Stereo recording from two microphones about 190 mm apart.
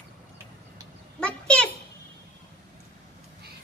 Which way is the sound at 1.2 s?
5° left (ahead or behind).